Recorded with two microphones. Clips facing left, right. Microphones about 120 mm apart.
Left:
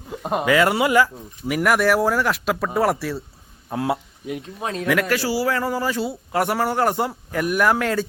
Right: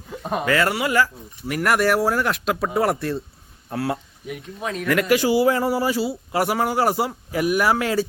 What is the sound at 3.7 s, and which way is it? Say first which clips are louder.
Speech: left 2 dB; 20° left (ahead or behind).